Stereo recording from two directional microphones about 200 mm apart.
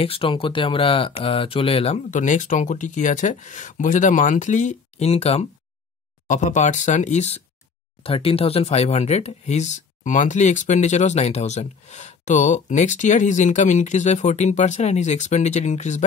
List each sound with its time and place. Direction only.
0.0 s speech: 30° left (ahead or behind)